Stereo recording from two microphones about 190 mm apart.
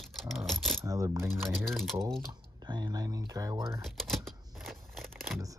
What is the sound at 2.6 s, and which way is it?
Speech, 20° right (ahead or behind).